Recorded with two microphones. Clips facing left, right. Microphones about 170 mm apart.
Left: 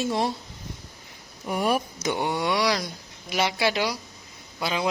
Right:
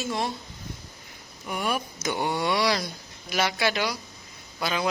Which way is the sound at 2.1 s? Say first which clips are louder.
Left 1 dB; 15° left (ahead or behind).